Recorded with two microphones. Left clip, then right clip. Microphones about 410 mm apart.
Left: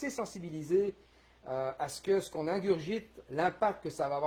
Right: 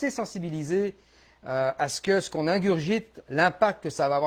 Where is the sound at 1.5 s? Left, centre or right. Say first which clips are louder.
Right 9 dB; right.